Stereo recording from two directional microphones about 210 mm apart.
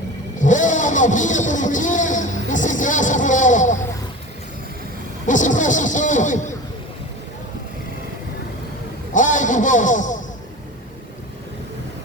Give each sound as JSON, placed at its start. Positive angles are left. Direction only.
{"t": 0.4, "sound": "vehicle", "side_deg": 35}
{"t": 5.2, "sound": "speech", "side_deg": 35}
{"t": 9.1, "sound": "a sound", "side_deg": 35}